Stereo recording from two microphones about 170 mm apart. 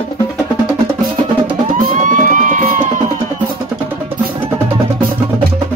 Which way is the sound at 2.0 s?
50° right (ahead or behind).